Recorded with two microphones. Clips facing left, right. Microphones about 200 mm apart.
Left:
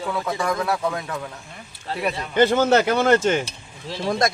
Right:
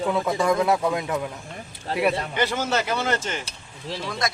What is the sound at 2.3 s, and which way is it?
Speech, 55° left (ahead or behind).